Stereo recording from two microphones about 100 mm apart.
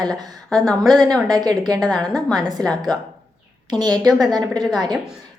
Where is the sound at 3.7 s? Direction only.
45° right (ahead or behind).